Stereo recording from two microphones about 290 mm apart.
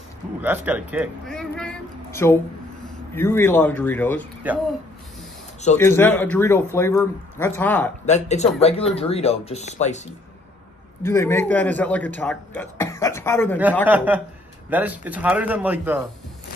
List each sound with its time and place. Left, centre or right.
0.4 s a sound: centre
3.2 s a man's voice: centre
5.8 s a man's voice: centre
8.0 s speech: left
11.0 s a man's voice: centre
13.8 s speech: centre